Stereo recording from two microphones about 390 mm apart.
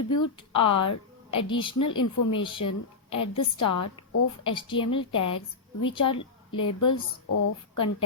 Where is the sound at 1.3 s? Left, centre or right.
Centre.